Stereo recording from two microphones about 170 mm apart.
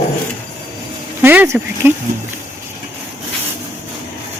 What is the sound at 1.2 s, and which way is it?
Speech, 10° right (ahead or behind).